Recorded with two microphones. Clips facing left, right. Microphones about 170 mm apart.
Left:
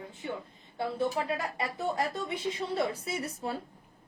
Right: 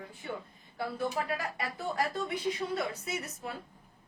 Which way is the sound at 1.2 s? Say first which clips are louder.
Left 2 dB; 25° left (ahead or behind).